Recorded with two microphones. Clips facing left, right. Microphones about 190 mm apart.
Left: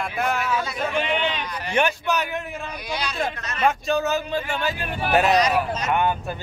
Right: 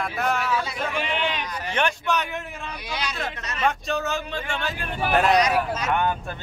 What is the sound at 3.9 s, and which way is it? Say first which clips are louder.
A man's voice: left 4 dB; centre (ahead or behind).